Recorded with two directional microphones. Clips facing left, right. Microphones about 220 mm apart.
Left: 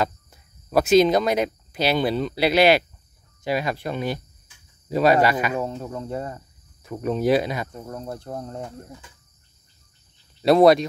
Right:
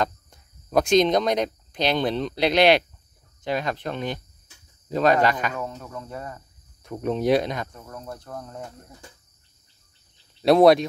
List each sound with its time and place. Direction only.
0.0 s speech: 5° left (ahead or behind)
5.6 s speech: 30° left (ahead or behind)
6.8 s speech: centre (ahead or behind)
7.7 s speech: 30° left (ahead or behind)
10.4 s speech: centre (ahead or behind)